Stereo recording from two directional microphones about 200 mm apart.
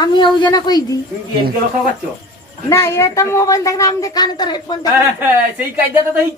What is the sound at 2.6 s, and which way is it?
Speech, 15° left (ahead or behind).